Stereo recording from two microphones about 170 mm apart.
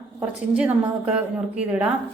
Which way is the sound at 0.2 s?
5° right (ahead or behind).